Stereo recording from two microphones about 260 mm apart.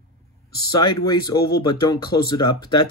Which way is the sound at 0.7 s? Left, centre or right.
Centre.